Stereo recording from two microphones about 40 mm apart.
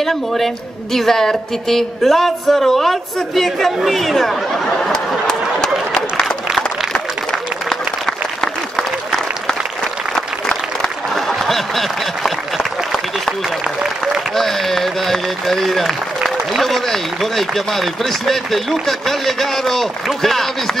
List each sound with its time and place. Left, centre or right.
0.0 s speech: centre
4.6 s a sound: centre
6.2 s applause: centre
6.9 s applause: centre
10.1 s applause: centre
11.1 s applause: centre
14.3 s speech: centre